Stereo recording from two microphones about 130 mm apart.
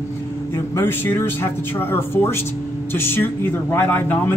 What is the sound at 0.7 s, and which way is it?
A man's voice, 20° left (ahead or behind).